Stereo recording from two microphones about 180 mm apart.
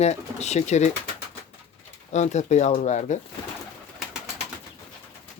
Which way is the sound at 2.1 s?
40° left (ahead or behind).